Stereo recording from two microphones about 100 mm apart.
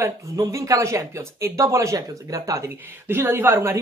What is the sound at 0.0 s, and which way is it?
Speech, 30° right (ahead or behind).